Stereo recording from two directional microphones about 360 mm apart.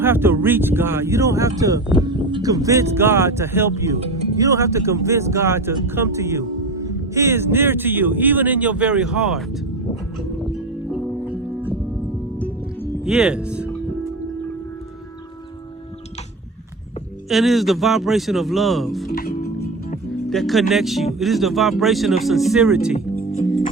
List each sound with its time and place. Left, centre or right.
0.0 s speech: centre
12.4 s music: centre
17.2 s speech: centre
19.0 s music: left
20.3 s speech: centre
23.0 s music: left